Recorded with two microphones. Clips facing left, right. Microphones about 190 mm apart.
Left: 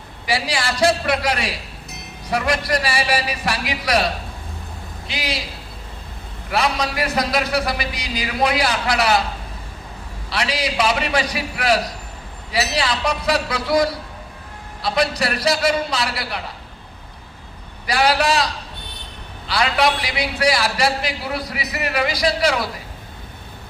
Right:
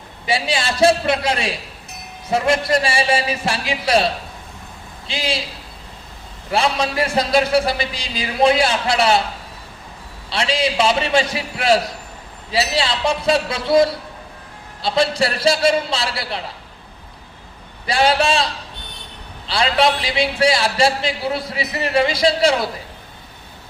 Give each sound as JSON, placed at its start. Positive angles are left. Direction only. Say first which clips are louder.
{"t": 0.3, "sound": "a man's voice", "louder": "right 2 dB", "side_deg": -25}
{"t": 6.5, "sound": "a man's voice", "louder": "right 2 dB", "side_deg": -25}
{"t": 10.2, "sound": "a man's voice", "louder": "right 3 dB", "side_deg": -25}
{"t": 17.8, "sound": "a man's voice", "louder": "right 1 dB", "side_deg": -25}